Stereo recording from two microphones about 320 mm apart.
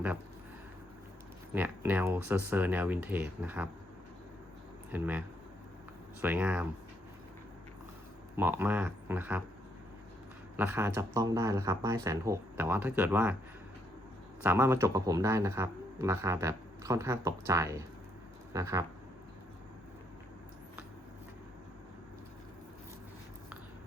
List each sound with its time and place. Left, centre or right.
1.5 s speech: centre
4.9 s speech: centre
6.2 s speech: centre
8.4 s speech: centre
10.6 s speech: centre
14.4 s speech: centre